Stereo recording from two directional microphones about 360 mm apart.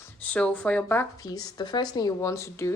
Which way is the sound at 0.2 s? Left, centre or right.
Centre.